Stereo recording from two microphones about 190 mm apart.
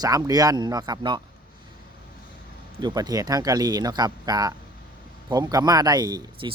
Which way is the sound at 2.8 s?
20° right (ahead or behind).